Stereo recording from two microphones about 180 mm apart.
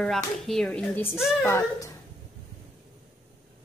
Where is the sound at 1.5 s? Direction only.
15° left (ahead or behind).